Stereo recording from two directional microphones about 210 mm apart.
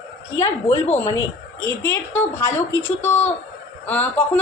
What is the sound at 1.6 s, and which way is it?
A woman's voice, 10° left (ahead or behind).